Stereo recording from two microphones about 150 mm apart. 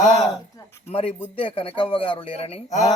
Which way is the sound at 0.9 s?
40° left (ahead or behind).